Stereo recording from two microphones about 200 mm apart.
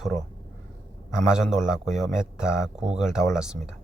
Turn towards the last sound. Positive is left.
turn(degrees=-5)  # may be behind; listen again after turning